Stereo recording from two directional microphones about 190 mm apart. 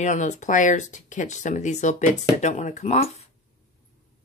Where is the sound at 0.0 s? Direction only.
40° left (ahead or behind).